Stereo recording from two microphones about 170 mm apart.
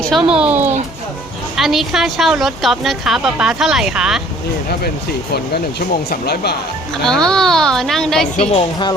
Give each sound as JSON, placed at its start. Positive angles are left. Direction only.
{"t": 0.0, "sound": "a woman's voice", "side_deg": 0}
{"t": 6.1, "sound": "speech", "side_deg": 65}
{"t": 7.0, "sound": "a woman's voice", "side_deg": 5}
{"t": 8.4, "sound": "a woman's voice", "side_deg": 35}